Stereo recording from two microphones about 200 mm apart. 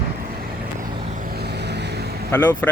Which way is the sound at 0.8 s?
45° right (ahead or behind).